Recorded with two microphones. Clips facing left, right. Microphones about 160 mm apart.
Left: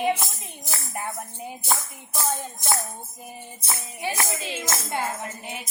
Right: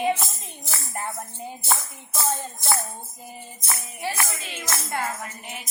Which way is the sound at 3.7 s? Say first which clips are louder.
Even; 20° left (ahead or behind).